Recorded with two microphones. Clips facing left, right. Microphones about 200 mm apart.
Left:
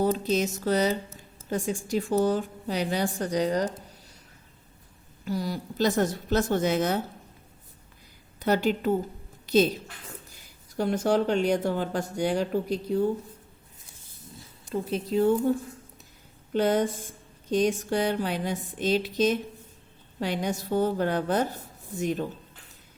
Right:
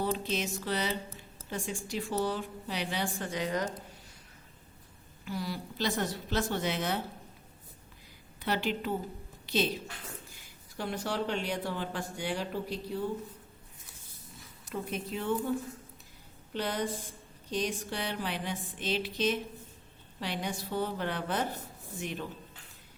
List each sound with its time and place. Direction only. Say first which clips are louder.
0.0 s a woman's voice: left 7 dB; 40° left (ahead or behind)
5.2 s speech: left 6 dB; 40° left (ahead or behind)
8.4 s speech: left 8 dB; 45° left (ahead or behind)
10.8 s speech: left 10 dB; 45° left (ahead or behind)
14.7 s a woman's voice: left 8 dB; 30° left (ahead or behind)